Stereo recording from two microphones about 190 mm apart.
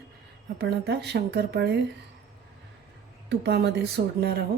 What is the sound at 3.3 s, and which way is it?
Speech, 60° right (ahead or behind).